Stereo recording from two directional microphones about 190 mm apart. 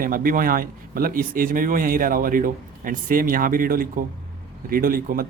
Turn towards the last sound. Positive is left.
turn(degrees=-50)  # may be behind; listen again after turning